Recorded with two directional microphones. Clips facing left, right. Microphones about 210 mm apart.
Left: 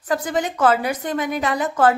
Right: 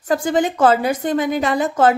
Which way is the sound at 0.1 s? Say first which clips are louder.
Right 5 dB; 30° right (ahead or behind).